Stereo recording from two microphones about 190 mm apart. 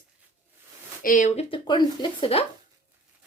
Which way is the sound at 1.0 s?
45° left (ahead or behind).